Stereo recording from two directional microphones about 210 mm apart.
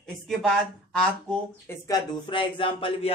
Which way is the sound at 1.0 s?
5° left (ahead or behind).